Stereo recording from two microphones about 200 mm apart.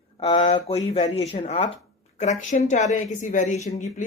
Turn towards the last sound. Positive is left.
turn(degrees=35)  # may be behind; listen again after turning